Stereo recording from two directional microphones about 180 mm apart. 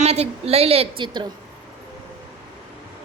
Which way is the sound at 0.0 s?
35° right (ahead or behind).